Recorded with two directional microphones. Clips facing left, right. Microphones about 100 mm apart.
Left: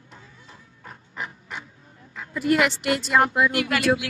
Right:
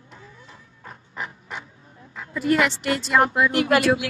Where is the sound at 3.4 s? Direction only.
40° right (ahead or behind).